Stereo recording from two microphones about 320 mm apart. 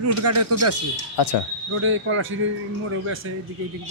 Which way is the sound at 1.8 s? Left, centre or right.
Right.